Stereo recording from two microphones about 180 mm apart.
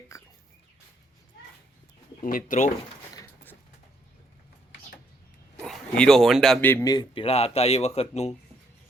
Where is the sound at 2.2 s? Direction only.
50° left (ahead or behind).